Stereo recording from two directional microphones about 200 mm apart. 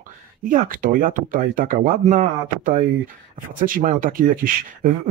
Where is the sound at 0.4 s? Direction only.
40° right (ahead or behind).